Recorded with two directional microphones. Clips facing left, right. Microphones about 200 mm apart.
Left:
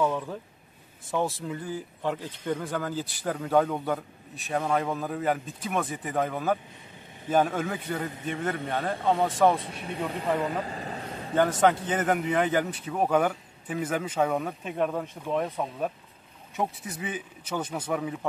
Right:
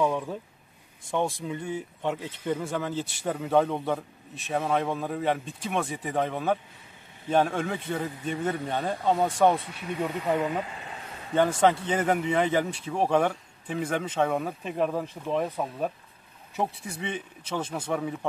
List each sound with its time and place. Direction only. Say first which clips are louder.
0.0 s a sound: right 1 dB; 10° right (ahead or behind)
1.0 s speech: even; 5° left (ahead or behind)
9.6 s speech: right 2 dB; 30° left (ahead or behind)
10.4 s vehicle: even; 35° left (ahead or behind)
11.3 s speech: even; centre (ahead or behind)